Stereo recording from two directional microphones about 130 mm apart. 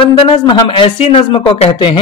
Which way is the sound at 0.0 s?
40° left (ahead or behind).